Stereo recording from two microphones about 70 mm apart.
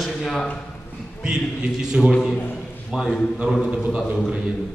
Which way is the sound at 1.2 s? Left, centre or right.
Centre.